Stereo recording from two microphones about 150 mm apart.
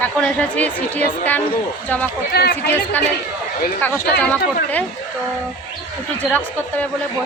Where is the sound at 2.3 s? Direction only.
90° left.